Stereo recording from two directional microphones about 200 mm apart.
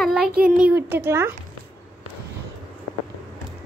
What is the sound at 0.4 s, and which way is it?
Speech, 5° right (ahead or behind).